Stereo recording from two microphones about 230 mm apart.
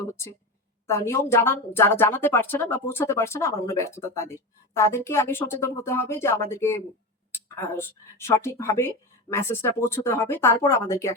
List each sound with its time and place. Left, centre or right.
0.9 s a woman's voice: centre